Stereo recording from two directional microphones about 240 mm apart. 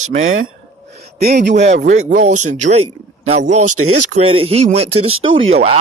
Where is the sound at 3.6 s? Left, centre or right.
Right.